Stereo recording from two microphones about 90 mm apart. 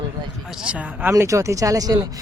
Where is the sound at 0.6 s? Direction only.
15° right (ahead or behind).